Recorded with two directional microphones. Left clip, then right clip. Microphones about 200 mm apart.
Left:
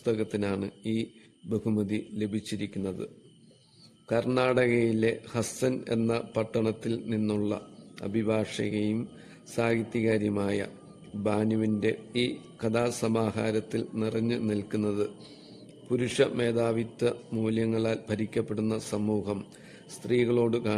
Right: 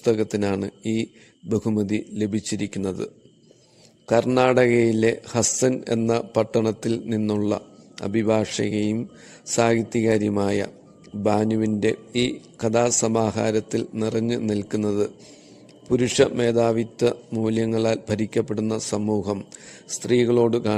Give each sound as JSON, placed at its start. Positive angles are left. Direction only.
{"t": 0.0, "sound": "speech", "side_deg": -25}
{"t": 4.4, "sound": "speech", "side_deg": -25}